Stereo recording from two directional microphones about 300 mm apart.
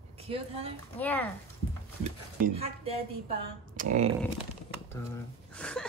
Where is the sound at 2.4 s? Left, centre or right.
Centre.